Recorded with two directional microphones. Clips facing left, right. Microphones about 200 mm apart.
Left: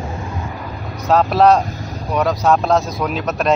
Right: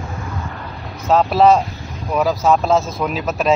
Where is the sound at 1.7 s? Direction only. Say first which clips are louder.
Left 3 dB; 35° left (ahead or behind).